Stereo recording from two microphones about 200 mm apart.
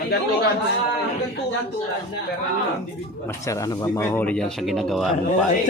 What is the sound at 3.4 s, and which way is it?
Speech, 15° left (ahead or behind).